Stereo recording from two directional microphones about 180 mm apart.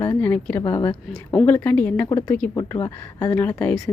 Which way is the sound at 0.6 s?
25° left (ahead or behind).